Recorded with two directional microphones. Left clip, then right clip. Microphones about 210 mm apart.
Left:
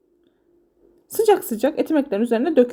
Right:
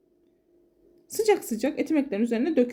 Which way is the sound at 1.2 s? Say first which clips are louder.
Left 6 dB; 15° left (ahead or behind).